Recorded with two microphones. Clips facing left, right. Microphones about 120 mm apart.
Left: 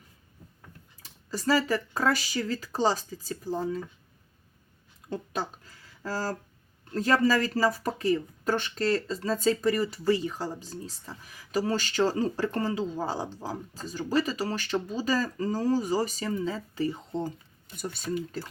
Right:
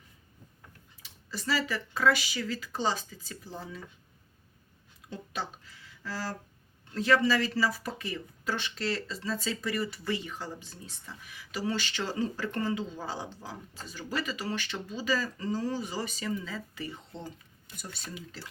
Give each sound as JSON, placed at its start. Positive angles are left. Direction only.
{"t": 1.0, "sound": "speech", "side_deg": 40}
{"t": 5.0, "sound": "a sound", "side_deg": 45}
{"t": 6.9, "sound": "speech", "side_deg": 45}